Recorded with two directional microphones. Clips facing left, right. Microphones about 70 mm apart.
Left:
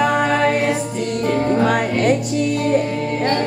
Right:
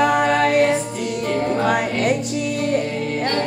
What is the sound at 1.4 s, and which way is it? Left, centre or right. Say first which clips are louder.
Music: left 1 dB; centre.